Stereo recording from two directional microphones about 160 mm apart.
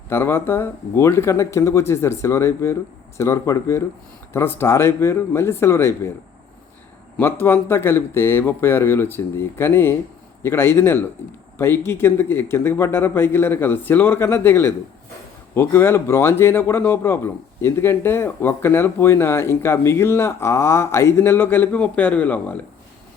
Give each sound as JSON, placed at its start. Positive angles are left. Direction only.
{"t": 0.1, "sound": "speech", "side_deg": 15}
{"t": 7.2, "sound": "speech", "side_deg": 15}